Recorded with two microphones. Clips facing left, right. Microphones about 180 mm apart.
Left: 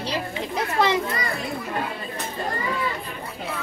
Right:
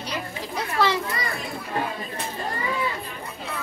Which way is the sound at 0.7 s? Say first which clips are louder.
Left 1 dB; 20° left (ahead or behind).